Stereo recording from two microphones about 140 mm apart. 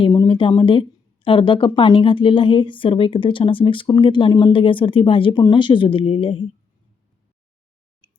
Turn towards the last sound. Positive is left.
turn(degrees=40)  # may be behind; listen again after turning